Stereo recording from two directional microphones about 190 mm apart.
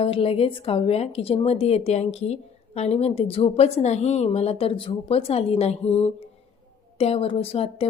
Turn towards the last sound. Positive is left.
turn(degrees=30)  # may be behind; listen again after turning